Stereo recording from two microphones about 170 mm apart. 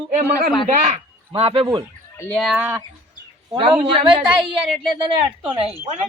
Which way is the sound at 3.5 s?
30° right (ahead or behind).